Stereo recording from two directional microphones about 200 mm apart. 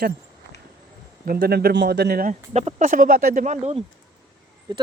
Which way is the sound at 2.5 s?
35° right (ahead or behind).